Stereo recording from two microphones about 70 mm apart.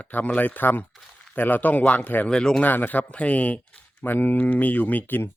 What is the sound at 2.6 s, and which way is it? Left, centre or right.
Speech, left.